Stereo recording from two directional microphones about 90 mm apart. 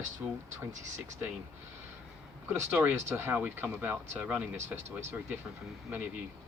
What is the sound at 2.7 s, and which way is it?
Speech, 20° right (ahead or behind).